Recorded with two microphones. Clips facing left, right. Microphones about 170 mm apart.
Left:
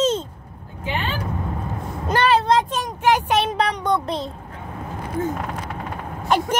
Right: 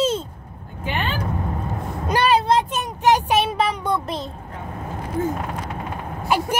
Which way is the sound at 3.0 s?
15° right (ahead or behind).